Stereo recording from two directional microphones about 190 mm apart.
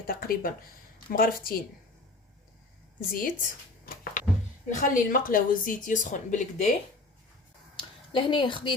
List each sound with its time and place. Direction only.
0.1 s speech: 50° left (ahead or behind)
3.1 s speech: 45° left (ahead or behind)
7.8 s a sound: 25° left (ahead or behind)